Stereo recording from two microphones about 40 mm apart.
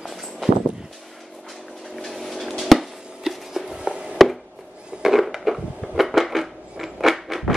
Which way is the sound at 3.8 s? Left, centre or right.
Right.